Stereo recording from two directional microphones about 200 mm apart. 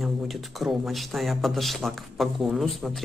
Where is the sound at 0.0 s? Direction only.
Centre (ahead or behind).